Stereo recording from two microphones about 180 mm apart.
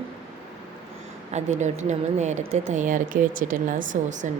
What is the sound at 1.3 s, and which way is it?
A woman's voice, 40° right (ahead or behind).